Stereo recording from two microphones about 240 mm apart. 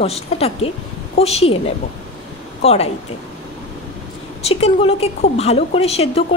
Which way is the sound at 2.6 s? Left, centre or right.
Left.